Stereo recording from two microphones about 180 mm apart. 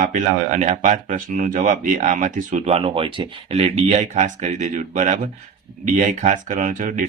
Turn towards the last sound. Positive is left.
turn(degrees=-45)  # may be behind; listen again after turning